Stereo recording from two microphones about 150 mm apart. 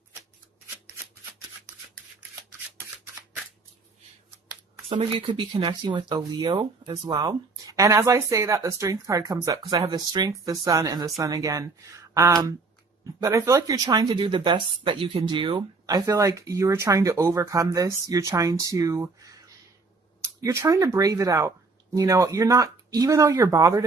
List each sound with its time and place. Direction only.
4.9 s speech: 40° right (ahead or behind); by 19.1 s 20° right (ahead or behind)
20.4 s speech: 20° right (ahead or behind)